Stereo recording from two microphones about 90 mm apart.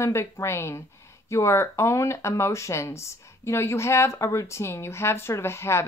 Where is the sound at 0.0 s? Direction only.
30° left (ahead or behind).